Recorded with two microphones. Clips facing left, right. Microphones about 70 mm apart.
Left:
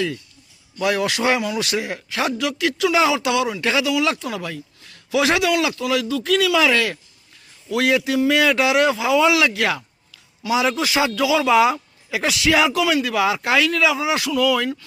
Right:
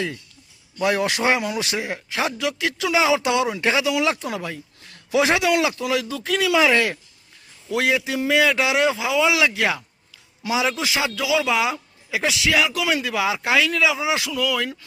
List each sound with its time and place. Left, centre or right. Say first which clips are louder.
0.8 s a man's voice: even; right; by 12.8 s centre
12.8 s speech: left 3 dB; centre